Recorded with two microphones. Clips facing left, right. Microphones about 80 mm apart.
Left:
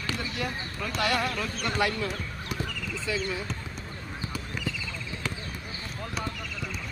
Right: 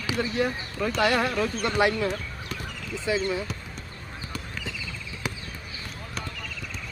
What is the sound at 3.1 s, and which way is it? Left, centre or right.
Speech, right.